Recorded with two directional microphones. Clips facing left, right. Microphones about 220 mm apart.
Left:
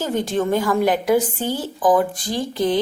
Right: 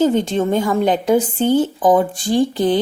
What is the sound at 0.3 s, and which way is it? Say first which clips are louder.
A woman's voice: right 2 dB; 25° right (ahead or behind).